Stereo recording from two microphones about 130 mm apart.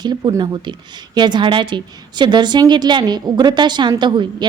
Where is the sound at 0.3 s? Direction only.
35° right (ahead or behind).